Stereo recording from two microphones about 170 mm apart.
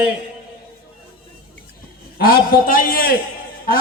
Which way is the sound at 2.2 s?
60° left (ahead or behind).